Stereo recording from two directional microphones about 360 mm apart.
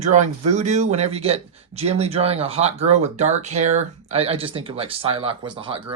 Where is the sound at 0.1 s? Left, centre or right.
Centre.